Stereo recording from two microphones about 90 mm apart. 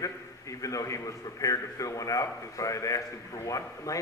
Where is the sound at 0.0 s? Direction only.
40° left (ahead or behind).